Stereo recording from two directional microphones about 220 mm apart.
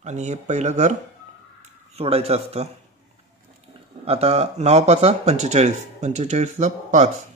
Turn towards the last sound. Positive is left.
turn(degrees=-30)  # may be behind; listen again after turning